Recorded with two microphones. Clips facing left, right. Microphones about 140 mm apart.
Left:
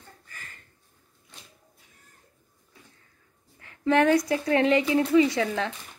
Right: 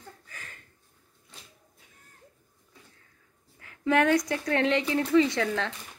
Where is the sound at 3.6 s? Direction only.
Centre (ahead or behind).